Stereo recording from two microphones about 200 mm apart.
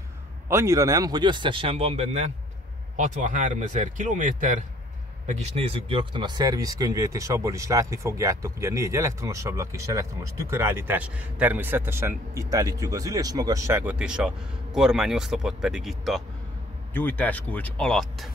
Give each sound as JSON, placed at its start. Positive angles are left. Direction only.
{"t": 0.5, "sound": "a man's voice", "side_deg": -15}